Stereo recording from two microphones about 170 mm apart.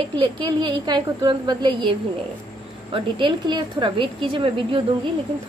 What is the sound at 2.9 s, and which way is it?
A woman's voice, 30° right (ahead or behind).